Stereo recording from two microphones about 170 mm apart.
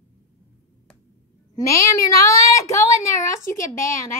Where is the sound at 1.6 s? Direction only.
20° left (ahead or behind).